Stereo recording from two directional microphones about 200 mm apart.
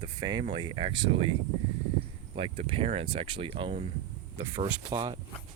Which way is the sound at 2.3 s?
30° right (ahead or behind).